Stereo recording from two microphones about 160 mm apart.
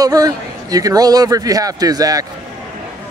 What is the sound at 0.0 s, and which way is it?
A man's voice, 25° right (ahead or behind).